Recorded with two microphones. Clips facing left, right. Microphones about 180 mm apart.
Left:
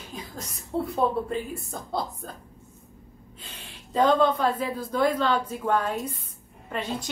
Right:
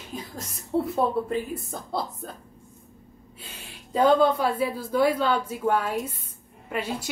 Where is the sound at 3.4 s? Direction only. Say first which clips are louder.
Right 1 dB; 10° right (ahead or behind).